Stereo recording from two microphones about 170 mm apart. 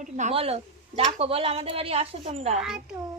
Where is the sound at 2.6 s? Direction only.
5° right (ahead or behind).